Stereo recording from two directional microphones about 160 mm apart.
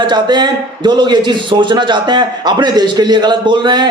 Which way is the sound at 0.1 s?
30° right (ahead or behind).